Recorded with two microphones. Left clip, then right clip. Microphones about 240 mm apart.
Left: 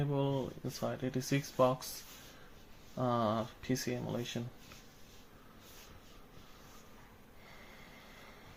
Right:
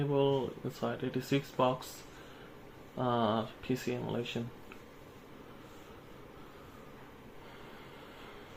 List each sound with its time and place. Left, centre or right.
0.1 s speech: left
3.0 s speech: left